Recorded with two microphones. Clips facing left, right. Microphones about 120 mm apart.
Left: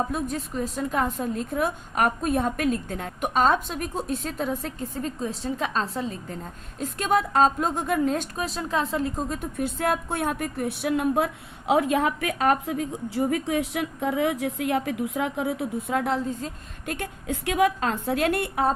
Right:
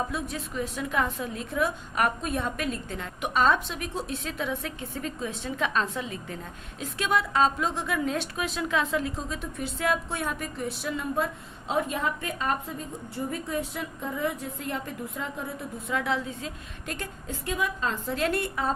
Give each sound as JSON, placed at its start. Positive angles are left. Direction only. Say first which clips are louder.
{"t": 0.1, "sound": "a woman's voice", "louder": "left 4 dB", "side_deg": 40}
{"t": 11.7, "sound": "a woman's voice", "louder": "left 6 dB", "side_deg": 85}
{"t": 16.0, "sound": "a woman's voice", "louder": "left 3 dB", "side_deg": 45}